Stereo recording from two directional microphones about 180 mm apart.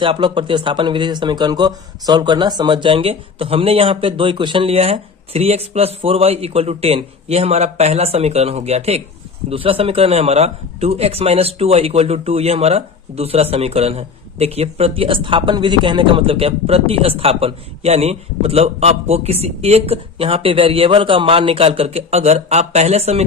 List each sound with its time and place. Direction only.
0.0 s a man's voice: 30° right (ahead or behind)